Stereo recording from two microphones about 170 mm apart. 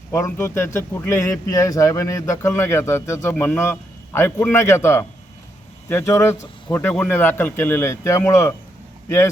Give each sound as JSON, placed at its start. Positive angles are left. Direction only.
{"t": 0.1, "sound": "speech", "side_deg": 15}